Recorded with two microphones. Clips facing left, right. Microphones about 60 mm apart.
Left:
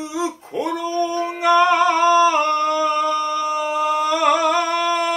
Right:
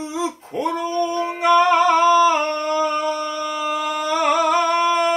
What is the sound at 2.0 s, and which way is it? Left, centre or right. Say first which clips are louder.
Humming: even; left.